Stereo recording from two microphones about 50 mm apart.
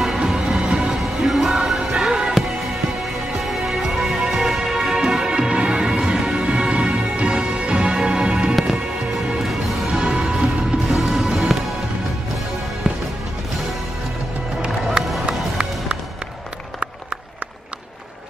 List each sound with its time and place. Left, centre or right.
0.0 s music: centre
3.3 s music: centre
9.9 s music: centre
12.9 s music: centre
15.2 s music: centre